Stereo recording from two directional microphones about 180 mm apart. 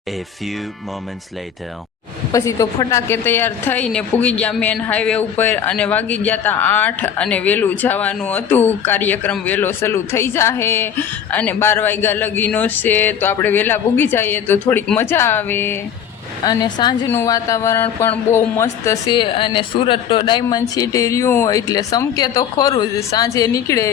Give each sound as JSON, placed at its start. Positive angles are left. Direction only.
{"t": 2.3, "sound": "a woman's voice", "side_deg": 15}
{"t": 16.4, "sound": "a woman's voice", "side_deg": 25}
{"t": 19.2, "sound": "speech", "side_deg": 30}